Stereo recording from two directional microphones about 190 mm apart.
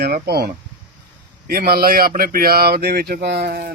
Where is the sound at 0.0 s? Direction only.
55° right (ahead or behind).